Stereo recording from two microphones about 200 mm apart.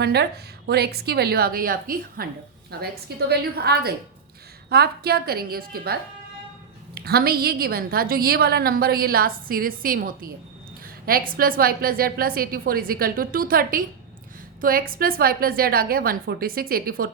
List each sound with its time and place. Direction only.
0.0 s a woman's voice: 55° right (ahead or behind)
11.3 s a woman's voice: 45° right (ahead or behind)